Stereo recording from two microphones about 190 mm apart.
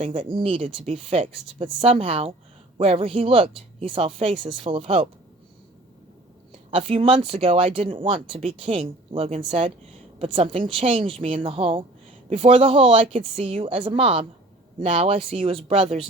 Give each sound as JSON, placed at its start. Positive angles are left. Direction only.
{"t": 0.0, "sound": "speech", "side_deg": -25}
{"t": 6.7, "sound": "speech", "side_deg": -30}